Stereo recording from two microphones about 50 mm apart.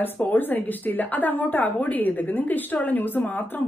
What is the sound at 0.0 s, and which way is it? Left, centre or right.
A woman's voice, left.